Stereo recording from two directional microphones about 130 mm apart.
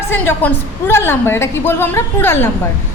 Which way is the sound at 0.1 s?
15° left (ahead or behind).